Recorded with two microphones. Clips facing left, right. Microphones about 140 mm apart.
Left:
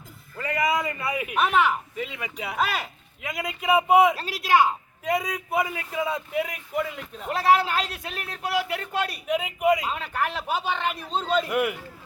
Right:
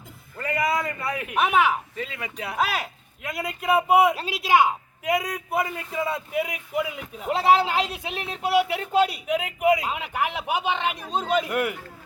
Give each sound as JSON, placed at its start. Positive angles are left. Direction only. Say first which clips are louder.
{"t": 0.3, "sound": "a sound", "louder": "even", "side_deg": 0}
{"t": 1.4, "sound": "a man's voice", "louder": "right 1 dB", "side_deg": -10}
{"t": 2.0, "sound": "a man's voice", "louder": "even", "side_deg": 5}
{"t": 5.0, "sound": "a man's voice", "louder": "right 1 dB", "side_deg": -10}
{"t": 7.3, "sound": "a man's voice", "louder": "right 1 dB", "side_deg": -25}
{"t": 9.2, "sound": "a man's voice", "louder": "right 1 dB", "side_deg": 0}
{"t": 11.4, "sound": "speech", "louder": "left 1 dB", "side_deg": 0}